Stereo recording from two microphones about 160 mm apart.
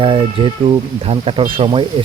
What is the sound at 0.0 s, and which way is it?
Speech, 35° right (ahead or behind).